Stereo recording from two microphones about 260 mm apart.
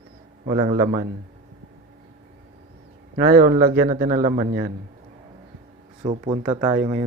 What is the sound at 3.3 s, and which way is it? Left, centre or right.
A man's voice, right.